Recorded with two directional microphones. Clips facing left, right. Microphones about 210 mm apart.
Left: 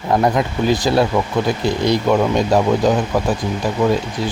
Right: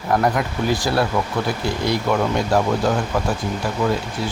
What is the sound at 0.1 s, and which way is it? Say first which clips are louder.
Speech: left 3 dB; 20° left (ahead or behind).